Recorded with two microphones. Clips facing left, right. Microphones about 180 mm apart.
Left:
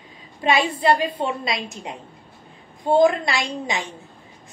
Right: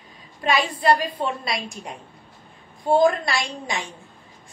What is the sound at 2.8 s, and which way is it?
Speech, 20° left (ahead or behind).